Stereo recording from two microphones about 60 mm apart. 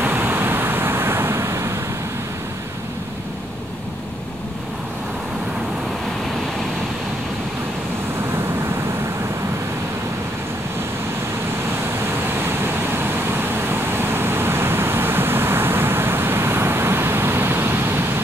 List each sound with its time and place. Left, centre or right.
0.0 s vehicle: right
12.4 s vehicle: right